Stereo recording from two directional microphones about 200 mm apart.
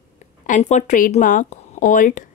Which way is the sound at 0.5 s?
35° left (ahead or behind).